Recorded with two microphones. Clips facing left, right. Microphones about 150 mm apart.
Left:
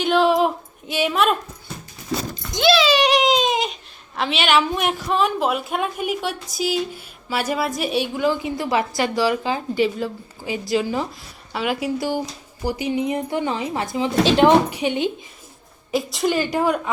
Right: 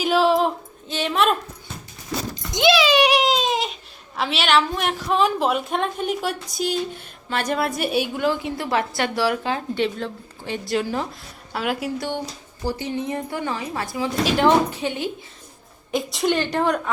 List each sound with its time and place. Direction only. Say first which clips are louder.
0.0 s female singing: left 1 dB; 5° right (ahead or behind)
0.9 s a woman's voice: left 1 dB; 10° left (ahead or behind)
2.5 s a sound: left 1 dB; 20° right (ahead or behind); by 3.8 s centre (ahead or behind)
4.2 s a woman's voice: left 1 dB; centre (ahead or behind); by 15.1 s 20° left (ahead or behind)
15.9 s a woman's voice: left 1 dB; centre (ahead or behind)